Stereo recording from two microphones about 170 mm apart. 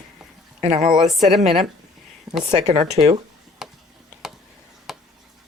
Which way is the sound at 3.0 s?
35° right (ahead or behind).